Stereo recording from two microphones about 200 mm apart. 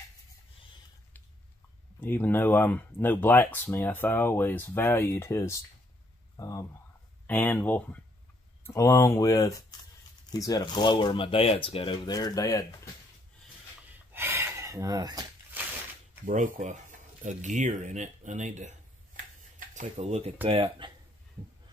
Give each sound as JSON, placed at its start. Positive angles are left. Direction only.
{"t": 2.0, "sound": "speech", "side_deg": 10}
{"t": 14.1, "sound": "a sound", "side_deg": -10}
{"t": 16.3, "sound": "speech", "side_deg": -45}